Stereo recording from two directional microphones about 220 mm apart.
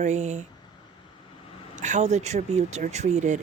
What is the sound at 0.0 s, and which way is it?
Speech, 30° right (ahead or behind).